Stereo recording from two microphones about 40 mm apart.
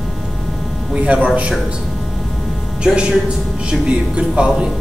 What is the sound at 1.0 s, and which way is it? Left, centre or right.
Speech, right.